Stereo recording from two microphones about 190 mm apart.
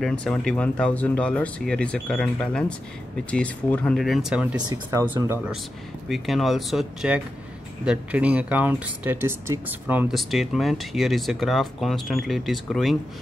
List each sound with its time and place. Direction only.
0.0 s speech: 5° left (ahead or behind)
4.6 s speech: 20° right (ahead or behind)
6.0 s speech: centre (ahead or behind)